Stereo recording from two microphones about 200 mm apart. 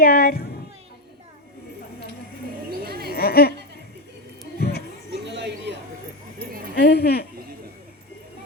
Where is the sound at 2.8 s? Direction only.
50° right (ahead or behind).